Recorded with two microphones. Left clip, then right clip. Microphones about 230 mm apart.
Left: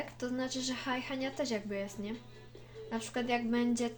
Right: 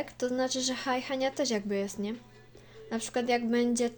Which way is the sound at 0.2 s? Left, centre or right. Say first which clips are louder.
Right 8 dB; right.